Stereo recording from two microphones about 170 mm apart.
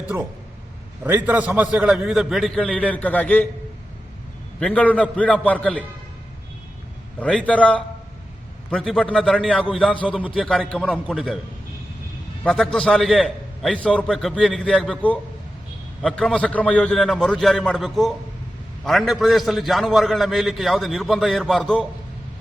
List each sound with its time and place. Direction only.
1.0 s a man's voice: 10° right (ahead or behind); by 3.4 s 10° left (ahead or behind)
4.6 s a man's voice: 10° left (ahead or behind)
7.2 s a man's voice: 5° left (ahead or behind); by 10.3 s 10° right (ahead or behind)
10.3 s a man's voice: 5° left (ahead or behind)
12.4 s a man's voice: 5° left (ahead or behind)